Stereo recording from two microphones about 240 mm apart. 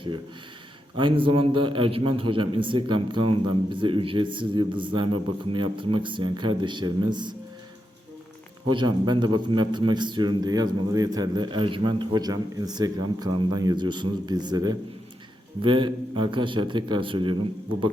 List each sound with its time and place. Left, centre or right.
0.9 s a man's voice: right
8.7 s a man's voice: centre